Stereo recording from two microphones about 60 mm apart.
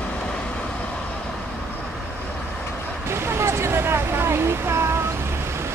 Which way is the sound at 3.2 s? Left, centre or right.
Right.